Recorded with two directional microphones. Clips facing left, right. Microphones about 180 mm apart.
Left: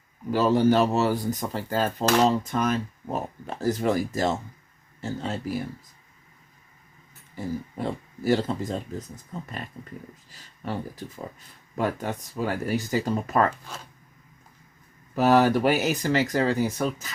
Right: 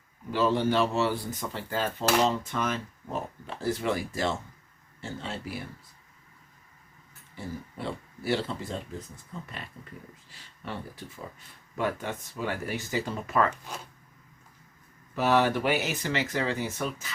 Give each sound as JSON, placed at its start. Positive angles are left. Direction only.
{"t": 0.3, "sound": "speech", "side_deg": 40}
{"t": 7.3, "sound": "speech", "side_deg": 40}
{"t": 13.5, "sound": "speech", "side_deg": -15}
{"t": 15.1, "sound": "speech", "side_deg": 40}